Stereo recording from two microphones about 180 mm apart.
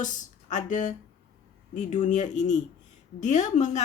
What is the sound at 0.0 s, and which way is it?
Speech, 45° left (ahead or behind).